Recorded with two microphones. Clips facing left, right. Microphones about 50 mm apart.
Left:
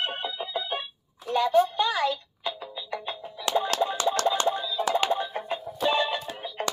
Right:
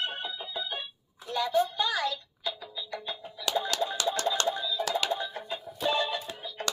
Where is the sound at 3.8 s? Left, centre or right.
Left.